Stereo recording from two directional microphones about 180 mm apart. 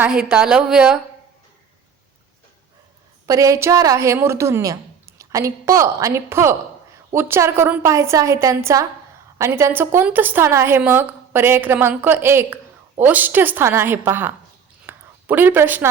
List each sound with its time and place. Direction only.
0.1 s a woman's voice: 5° right (ahead or behind)
3.2 s a woman's voice: 20° right (ahead or behind)
14.8 s a sound: 10° right (ahead or behind)